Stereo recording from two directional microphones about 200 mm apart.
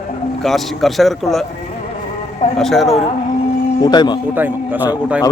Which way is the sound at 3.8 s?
20° left (ahead or behind).